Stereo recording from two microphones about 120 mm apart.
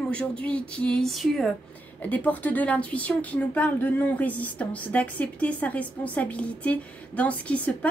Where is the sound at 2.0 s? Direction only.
15° left (ahead or behind).